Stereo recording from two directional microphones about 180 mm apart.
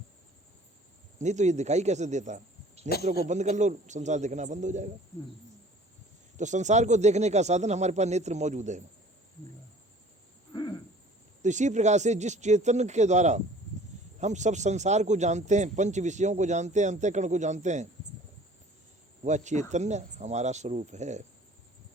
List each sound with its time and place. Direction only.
1.2 s a man's voice: 40° right (ahead or behind)
6.3 s a man's voice: 40° right (ahead or behind)
10.5 s owl: 25° left (ahead or behind)
11.4 s a man's voice: 40° right (ahead or behind)
19.2 s a man's voice: 40° right (ahead or behind)